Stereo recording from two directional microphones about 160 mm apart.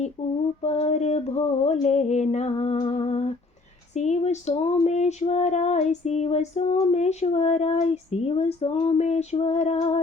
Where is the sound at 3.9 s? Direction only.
45° left (ahead or behind).